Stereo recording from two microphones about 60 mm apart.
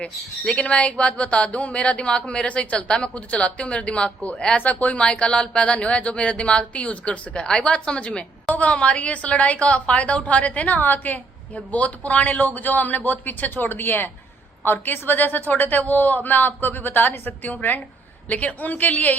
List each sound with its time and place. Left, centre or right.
0.0 s a woman's voice: centre